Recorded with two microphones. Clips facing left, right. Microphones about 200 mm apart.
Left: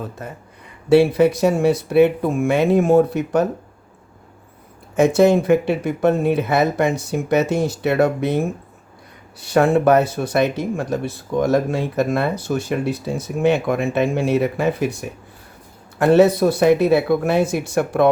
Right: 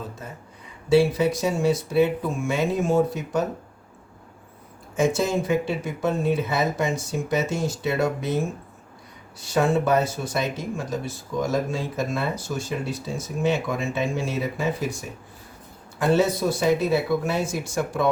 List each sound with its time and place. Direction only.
0.2 s speech: 65° left (ahead or behind)
4.9 s speech: 65° left (ahead or behind)
16.0 s speech: 65° left (ahead or behind)